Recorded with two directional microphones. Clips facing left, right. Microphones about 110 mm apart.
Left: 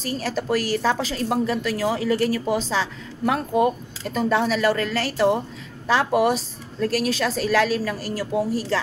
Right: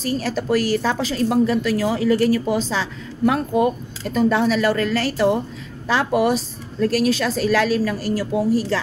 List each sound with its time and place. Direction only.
0.2 s a woman's voice: 35° left (ahead or behind)